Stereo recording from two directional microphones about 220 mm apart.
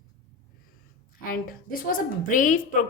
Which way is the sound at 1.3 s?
40° left (ahead or behind).